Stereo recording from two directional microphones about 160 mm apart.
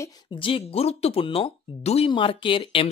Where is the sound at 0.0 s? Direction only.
30° left (ahead or behind).